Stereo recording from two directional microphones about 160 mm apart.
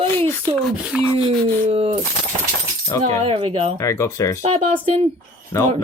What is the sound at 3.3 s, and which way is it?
Speech, 35° right (ahead or behind).